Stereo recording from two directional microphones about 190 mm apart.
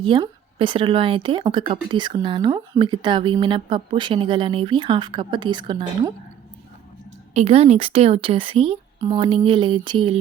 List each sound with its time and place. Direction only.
0.0 s speech: 25° right (ahead or behind)
7.3 s speech: 35° right (ahead or behind)